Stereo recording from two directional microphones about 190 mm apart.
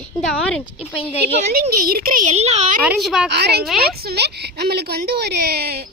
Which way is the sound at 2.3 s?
35° right (ahead or behind).